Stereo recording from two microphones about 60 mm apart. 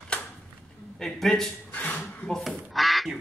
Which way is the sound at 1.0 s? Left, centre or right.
Centre.